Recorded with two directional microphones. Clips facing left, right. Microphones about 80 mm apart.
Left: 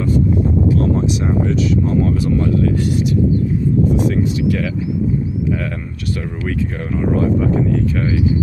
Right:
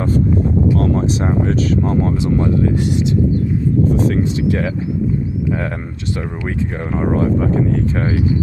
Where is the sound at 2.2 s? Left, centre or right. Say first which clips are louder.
Even; right.